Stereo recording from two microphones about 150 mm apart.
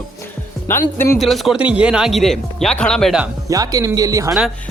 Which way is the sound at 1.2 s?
Centre (ahead or behind).